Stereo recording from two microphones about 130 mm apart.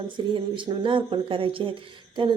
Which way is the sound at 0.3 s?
40° right (ahead or behind).